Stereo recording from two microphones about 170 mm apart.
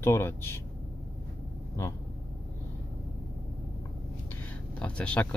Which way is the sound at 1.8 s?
15° left (ahead or behind).